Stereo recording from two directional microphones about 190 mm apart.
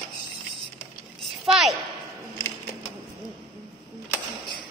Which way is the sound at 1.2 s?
Centre (ahead or behind).